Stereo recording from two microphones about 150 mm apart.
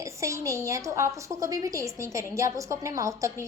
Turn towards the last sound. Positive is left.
turn(degrees=-20)  # may be behind; listen again after turning